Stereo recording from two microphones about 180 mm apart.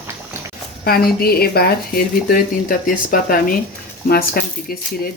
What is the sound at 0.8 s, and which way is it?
Speech, 55° left (ahead or behind).